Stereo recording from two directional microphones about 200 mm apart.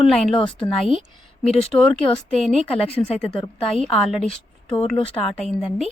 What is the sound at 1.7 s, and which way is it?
A woman's voice, centre (ahead or behind).